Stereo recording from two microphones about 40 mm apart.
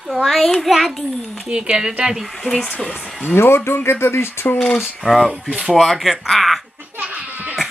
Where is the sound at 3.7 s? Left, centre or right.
Left.